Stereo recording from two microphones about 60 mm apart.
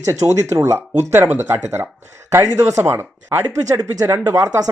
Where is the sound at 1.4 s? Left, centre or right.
Right.